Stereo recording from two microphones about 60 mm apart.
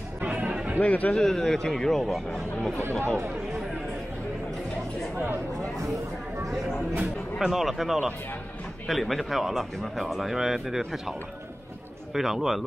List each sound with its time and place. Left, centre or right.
0.2 s music: right
0.7 s speech: left
1.1 s speech: centre
2.8 s speech: right
5.1 s speech: right
7.3 s speech: centre